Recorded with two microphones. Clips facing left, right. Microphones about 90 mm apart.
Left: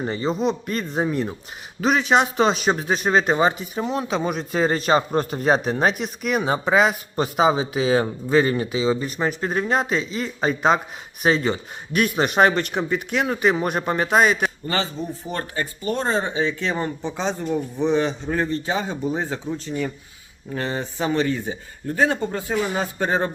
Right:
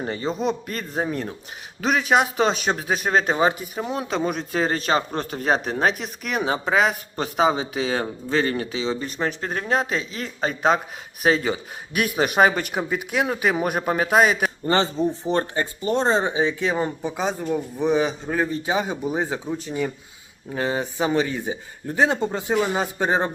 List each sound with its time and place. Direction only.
0.0 s speech: centre (ahead or behind)
14.7 s speech: 30° right (ahead or behind)